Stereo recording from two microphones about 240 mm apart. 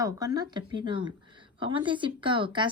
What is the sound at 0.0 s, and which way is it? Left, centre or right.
Speech, centre.